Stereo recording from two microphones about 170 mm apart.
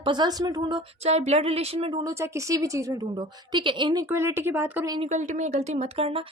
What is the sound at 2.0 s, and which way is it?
A woman's voice, 15° right (ahead or behind).